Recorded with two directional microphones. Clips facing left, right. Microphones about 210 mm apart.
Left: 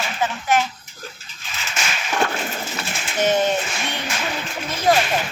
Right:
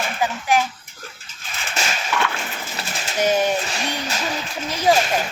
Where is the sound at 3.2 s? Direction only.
10° right (ahead or behind).